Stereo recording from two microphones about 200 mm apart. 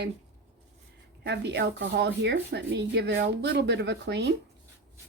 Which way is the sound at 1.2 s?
60° right (ahead or behind).